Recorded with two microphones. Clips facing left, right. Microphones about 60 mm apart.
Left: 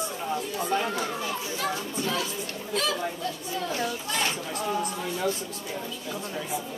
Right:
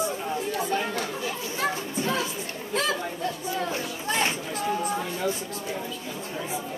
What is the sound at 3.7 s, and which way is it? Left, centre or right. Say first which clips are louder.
Speech: even; right.